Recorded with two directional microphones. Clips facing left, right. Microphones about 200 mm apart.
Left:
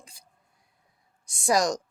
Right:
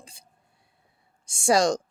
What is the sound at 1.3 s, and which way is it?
Speech, 30° right (ahead or behind).